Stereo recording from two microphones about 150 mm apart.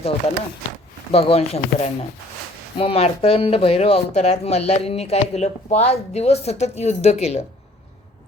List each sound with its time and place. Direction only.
1.1 s speech: 40° left (ahead or behind)